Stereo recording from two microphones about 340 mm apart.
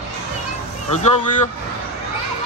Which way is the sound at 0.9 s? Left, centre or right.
Left.